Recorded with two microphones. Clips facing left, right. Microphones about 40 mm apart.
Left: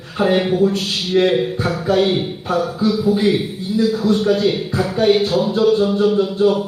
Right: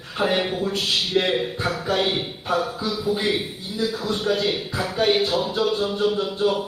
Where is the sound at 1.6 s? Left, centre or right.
Centre.